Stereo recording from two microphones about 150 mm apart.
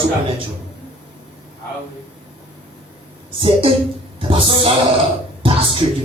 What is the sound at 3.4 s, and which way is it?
A man's voice, 35° right (ahead or behind).